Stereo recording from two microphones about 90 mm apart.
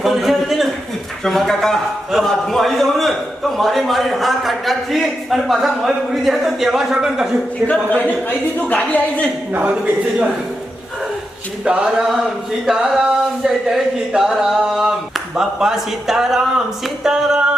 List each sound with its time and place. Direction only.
0.0 s a sound: centre (ahead or behind)
1.2 s a man's voice: 5° left (ahead or behind)
7.7 s a man's voice: 15° left (ahead or behind)
9.5 s a man's voice: 20° right (ahead or behind)
11.6 s a sound: 10° right (ahead or behind)
15.4 s a man's voice: 5° right (ahead or behind)